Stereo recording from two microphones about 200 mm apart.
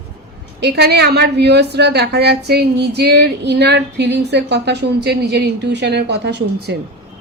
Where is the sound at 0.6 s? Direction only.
55° right (ahead or behind).